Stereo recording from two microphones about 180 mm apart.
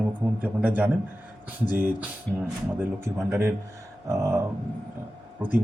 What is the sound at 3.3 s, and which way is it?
Speech, 15° right (ahead or behind).